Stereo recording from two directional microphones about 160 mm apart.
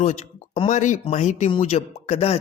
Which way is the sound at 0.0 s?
40° left (ahead or behind).